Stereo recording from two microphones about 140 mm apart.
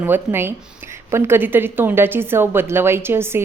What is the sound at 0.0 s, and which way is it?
A woman's voice, 15° right (ahead or behind).